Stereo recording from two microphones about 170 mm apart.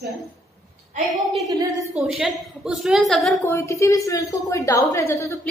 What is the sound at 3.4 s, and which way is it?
A woman's voice, 15° left (ahead or behind).